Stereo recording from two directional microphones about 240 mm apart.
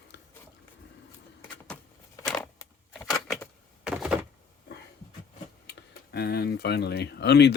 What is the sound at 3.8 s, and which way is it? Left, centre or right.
Door, centre.